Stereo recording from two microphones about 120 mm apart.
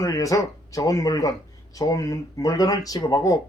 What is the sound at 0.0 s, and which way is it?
Speech, 30° left (ahead or behind).